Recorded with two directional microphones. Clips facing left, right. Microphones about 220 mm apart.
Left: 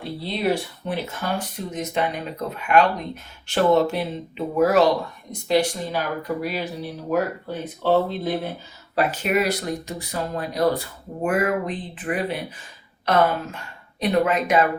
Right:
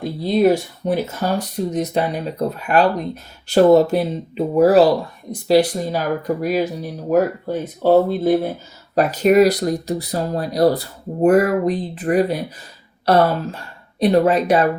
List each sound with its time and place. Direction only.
0.0 s speech: 45° right (ahead or behind)